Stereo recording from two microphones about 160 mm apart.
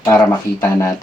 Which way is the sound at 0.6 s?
20° left (ahead or behind).